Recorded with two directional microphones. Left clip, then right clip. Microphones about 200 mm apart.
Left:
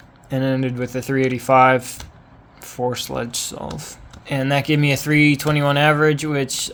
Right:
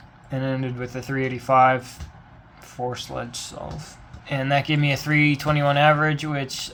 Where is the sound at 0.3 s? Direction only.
50° left (ahead or behind).